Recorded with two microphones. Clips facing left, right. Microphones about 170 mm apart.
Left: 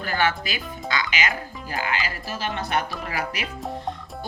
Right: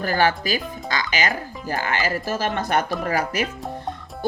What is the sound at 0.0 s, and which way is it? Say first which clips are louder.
Speech: right 4 dB; 40° right (ahead or behind).